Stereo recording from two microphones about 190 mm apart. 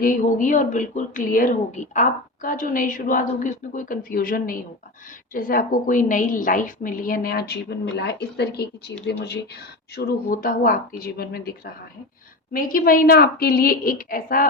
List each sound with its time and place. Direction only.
0.0 s speech: 45° left (ahead or behind)